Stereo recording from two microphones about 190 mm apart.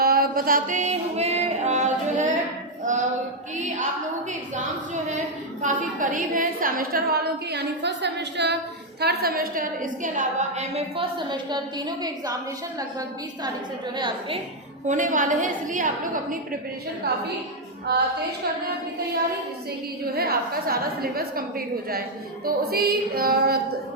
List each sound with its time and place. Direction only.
0.0 s a woman's voice: 50° right (ahead or behind)
5.6 s a woman's voice: 45° right (ahead or behind); by 12.4 s 20° right (ahead or behind)
13.9 s a woman's voice: 25° right (ahead or behind)
14.8 s a woman's voice: 40° right (ahead or behind)
17.8 s a sound: 60° right (ahead or behind)
20.1 s a woman's voice: 55° right (ahead or behind)
22.4 s a woman's voice: 55° right (ahead or behind)